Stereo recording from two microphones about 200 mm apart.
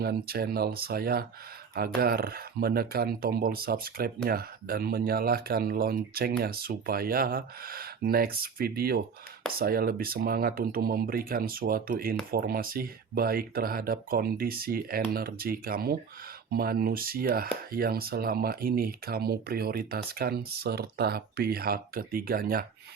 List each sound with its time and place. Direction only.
0.0 s speech: 50° right (ahead or behind)